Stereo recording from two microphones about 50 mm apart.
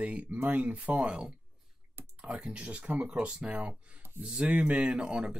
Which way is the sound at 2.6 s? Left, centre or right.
Right.